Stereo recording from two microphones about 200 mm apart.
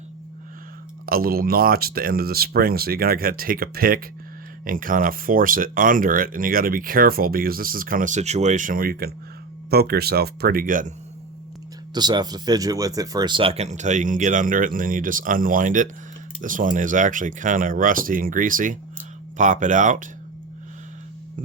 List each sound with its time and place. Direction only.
1.0 s speech: 50° right (ahead or behind)
11.9 s speech: 20° right (ahead or behind); by 20.1 s 40° right (ahead or behind)